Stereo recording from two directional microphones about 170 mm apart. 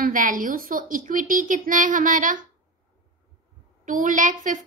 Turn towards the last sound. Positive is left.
turn(degrees=-50)  # may be behind; listen again after turning